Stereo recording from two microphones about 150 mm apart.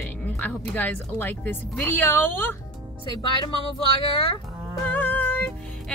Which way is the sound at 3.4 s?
40° left (ahead or behind).